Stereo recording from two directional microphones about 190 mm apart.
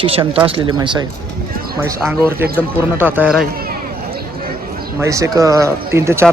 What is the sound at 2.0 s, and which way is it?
Speech, 10° right (ahead or behind).